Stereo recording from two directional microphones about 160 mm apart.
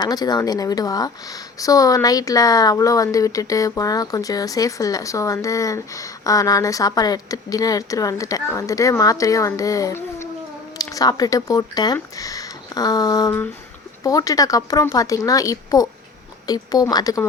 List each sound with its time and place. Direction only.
0.0 s speech: 25° left (ahead or behind)